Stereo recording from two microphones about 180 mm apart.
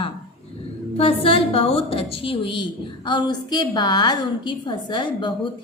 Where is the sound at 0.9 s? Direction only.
35° left (ahead or behind).